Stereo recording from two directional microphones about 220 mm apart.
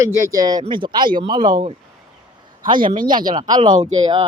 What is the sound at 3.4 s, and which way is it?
Speech, 20° right (ahead or behind).